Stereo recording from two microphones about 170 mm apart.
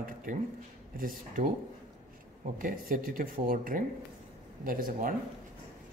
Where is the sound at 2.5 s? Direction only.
55° right (ahead or behind).